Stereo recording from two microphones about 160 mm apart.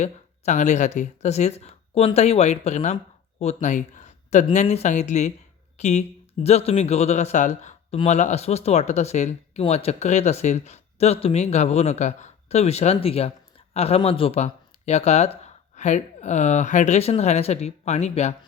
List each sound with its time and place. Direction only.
0.0 s speech: 45° left (ahead or behind)